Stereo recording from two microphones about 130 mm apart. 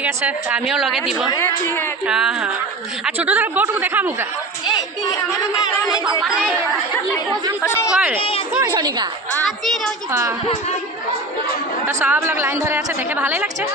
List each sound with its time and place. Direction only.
0.0 s a woman's voice: 10° right (ahead or behind)
1.3 s speech: 20° left (ahead or behind)
2.0 s a woman's voice: 5° right (ahead or behind)
7.6 s speech: 20° left (ahead or behind)
7.9 s speech: 10° right (ahead or behind)
8.7 s a woman's voice: 35° right (ahead or behind)
10.1 s speech: 20° right (ahead or behind)
11.9 s a woman's voice: 20° right (ahead or behind)